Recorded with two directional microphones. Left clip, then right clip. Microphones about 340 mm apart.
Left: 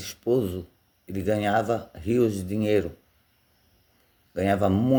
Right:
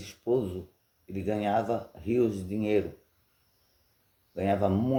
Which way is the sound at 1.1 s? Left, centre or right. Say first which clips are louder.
Left 4 dB; left.